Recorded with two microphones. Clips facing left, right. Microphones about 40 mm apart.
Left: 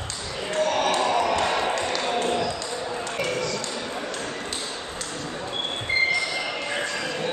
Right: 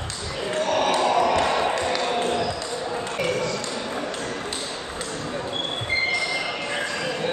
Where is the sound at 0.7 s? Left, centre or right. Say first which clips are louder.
Right 4 dB; centre.